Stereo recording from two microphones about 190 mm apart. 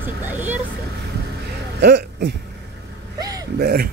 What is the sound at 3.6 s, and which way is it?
Speech, 55° right (ahead or behind).